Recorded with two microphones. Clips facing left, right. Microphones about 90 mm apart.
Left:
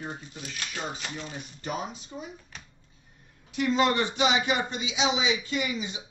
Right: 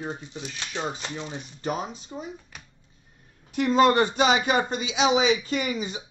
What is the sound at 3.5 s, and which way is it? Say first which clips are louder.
Speech: right 5 dB; 50° right (ahead or behind).